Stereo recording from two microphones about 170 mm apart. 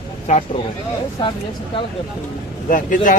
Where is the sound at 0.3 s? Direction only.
45° left (ahead or behind).